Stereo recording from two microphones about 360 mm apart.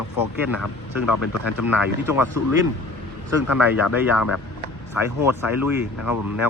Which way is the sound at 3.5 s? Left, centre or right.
Centre.